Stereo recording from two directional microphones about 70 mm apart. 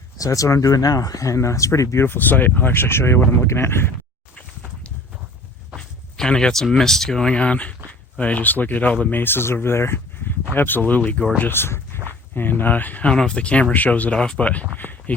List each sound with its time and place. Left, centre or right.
0.2 s speech: left
2.0 s speech: left
5.7 s speech: centre
11.3 s speech: left